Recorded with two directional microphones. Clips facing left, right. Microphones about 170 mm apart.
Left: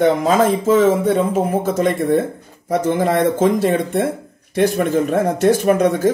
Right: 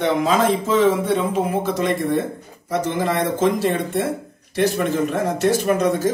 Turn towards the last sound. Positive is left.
turn(degrees=50)  # may be behind; listen again after turning